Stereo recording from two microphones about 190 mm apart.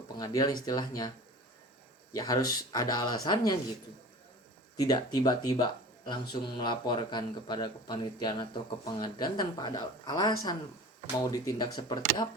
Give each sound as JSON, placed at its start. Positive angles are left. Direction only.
{"t": 0.2, "sound": "speech", "side_deg": 20}
{"t": 2.1, "sound": "speech", "side_deg": 20}
{"t": 4.8, "sound": "speech", "side_deg": 20}